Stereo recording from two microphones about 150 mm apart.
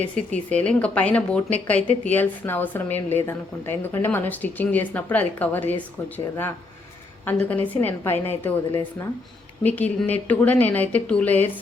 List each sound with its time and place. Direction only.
0.0 s a woman's voice: 10° left (ahead or behind)